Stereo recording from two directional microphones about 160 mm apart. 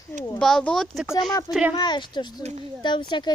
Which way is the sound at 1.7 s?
25° left (ahead or behind).